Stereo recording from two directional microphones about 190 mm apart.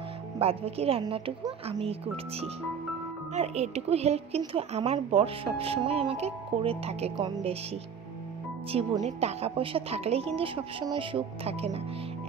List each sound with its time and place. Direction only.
0.4 s speech: 30° right (ahead or behind)
3.3 s speech: 35° right (ahead or behind)
7.2 s a woman's voice: 20° right (ahead or behind)
8.7 s a woman's voice: 30° right (ahead or behind)